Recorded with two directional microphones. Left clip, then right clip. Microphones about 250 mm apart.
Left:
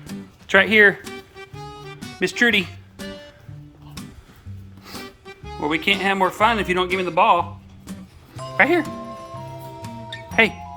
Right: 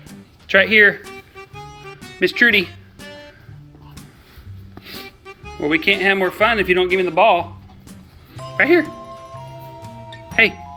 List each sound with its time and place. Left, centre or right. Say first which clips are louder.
0.4 s speech: right 2 dB; centre
2.1 s speech: right 4 dB; centre
3.0 s music: left 2 dB; centre
5.6 s speech: right 4 dB; centre
8.5 s speech: right 3 dB; centre
8.9 s music: left 1 dB; centre